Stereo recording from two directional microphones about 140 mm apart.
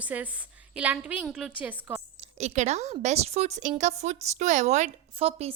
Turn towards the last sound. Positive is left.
turn(degrees=-45)  # may be behind; listen again after turning